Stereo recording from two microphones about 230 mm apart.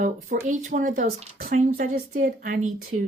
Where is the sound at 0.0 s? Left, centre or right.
Right.